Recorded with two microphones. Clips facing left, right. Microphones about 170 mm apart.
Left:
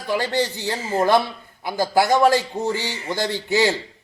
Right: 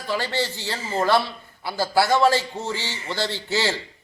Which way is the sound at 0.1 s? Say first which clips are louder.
Left 4 dB; 15° left (ahead or behind).